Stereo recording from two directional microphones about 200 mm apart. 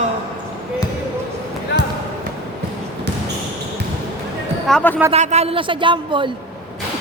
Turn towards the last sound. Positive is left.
turn(degrees=-25)  # may be behind; listen again after turning